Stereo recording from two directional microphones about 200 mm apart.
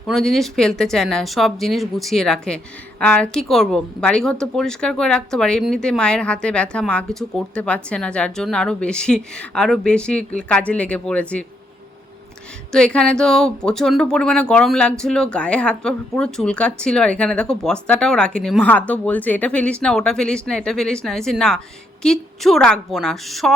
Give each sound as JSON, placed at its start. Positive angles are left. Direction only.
{"t": 0.1, "sound": "speech", "side_deg": 0}
{"t": 12.7, "sound": "speech", "side_deg": 5}